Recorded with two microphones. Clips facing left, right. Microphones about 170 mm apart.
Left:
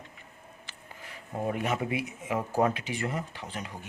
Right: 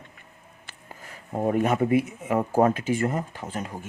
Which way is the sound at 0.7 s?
45° right (ahead or behind).